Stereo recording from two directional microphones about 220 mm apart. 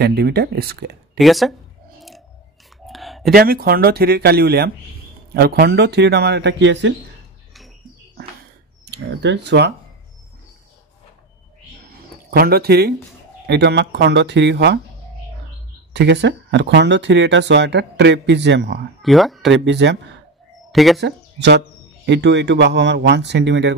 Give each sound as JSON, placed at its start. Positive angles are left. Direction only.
{"t": 0.0, "sound": "speech", "side_deg": -45}
{"t": 1.1, "sound": "speech", "side_deg": 0}
{"t": 2.0, "sound": "chewing", "side_deg": 0}
{"t": 2.9, "sound": "a sound", "side_deg": 0}
{"t": 3.3, "sound": "speech", "side_deg": -45}
{"t": 8.8, "sound": "speech", "side_deg": -50}
{"t": 12.3, "sound": "speech", "side_deg": -45}
{"t": 15.9, "sound": "speech", "side_deg": -50}
{"t": 19.0, "sound": "speech", "side_deg": 0}
{"t": 19.5, "sound": "speech", "side_deg": -55}
{"t": 20.7, "sound": "speech", "side_deg": 0}
{"t": 21.0, "sound": "speech", "side_deg": -50}